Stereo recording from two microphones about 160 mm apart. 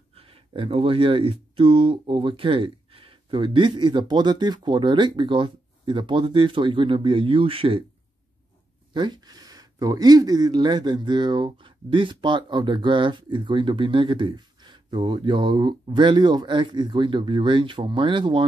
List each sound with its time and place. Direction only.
0.1 s speech: 35° right (ahead or behind)
8.9 s speech: 30° right (ahead or behind)